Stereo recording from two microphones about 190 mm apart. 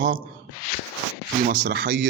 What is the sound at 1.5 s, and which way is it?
Speech, 55° right (ahead or behind).